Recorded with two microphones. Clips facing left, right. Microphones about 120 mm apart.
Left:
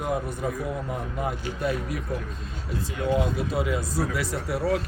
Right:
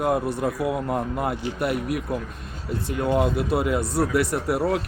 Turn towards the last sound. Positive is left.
turn(degrees=-60)  # may be behind; listen again after turning